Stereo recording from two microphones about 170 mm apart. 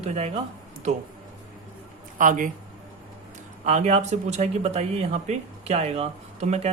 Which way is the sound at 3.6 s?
40° right (ahead or behind).